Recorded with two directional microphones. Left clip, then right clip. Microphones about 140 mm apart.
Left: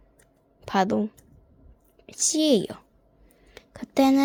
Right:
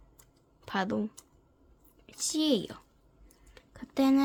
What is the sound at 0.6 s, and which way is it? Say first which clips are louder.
Speech: left 9 dB; 50° left (ahead or behind).